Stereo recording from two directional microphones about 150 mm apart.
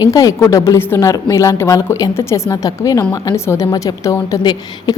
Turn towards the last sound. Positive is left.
turn(degrees=25)  # may be behind; listen again after turning